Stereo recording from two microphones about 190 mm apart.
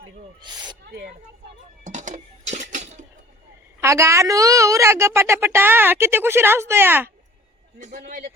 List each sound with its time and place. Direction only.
0.4 s speech: 25° right (ahead or behind)
0.9 s speech: 55° right (ahead or behind)
1.8 s a sound: 40° right (ahead or behind)
3.8 s a woman's voice: 15° right (ahead or behind)
7.8 s a man's voice: 40° right (ahead or behind)